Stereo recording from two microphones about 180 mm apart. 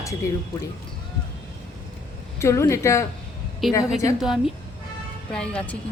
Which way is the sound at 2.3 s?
15° left (ahead or behind).